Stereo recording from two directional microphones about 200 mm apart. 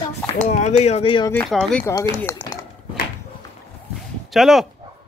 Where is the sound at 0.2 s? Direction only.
5° left (ahead or behind).